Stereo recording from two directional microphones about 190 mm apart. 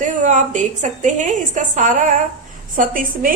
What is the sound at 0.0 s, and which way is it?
A woman's voice, 40° right (ahead or behind).